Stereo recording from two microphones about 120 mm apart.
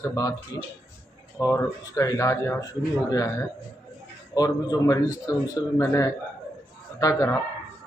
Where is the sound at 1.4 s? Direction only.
25° left (ahead or behind).